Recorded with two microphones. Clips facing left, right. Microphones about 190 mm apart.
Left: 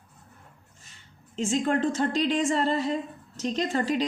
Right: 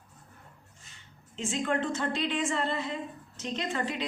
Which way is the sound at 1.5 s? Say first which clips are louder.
Left 5 dB; 40° left (ahead or behind).